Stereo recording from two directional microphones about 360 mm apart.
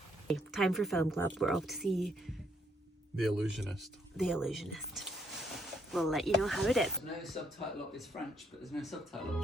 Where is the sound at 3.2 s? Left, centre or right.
Centre.